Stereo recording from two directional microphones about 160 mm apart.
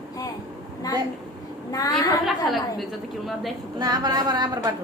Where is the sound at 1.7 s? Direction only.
20° left (ahead or behind).